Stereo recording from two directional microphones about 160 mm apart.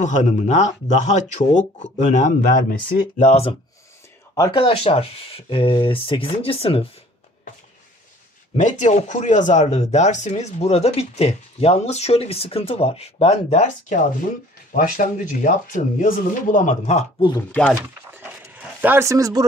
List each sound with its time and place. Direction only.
0.0 s speech: 50° left (ahead or behind)
4.4 s speech: 30° left (ahead or behind)
8.5 s speech: 50° left (ahead or behind)
17.4 s speech: 10° left (ahead or behind)
17.7 s a sound: 10° right (ahead or behind)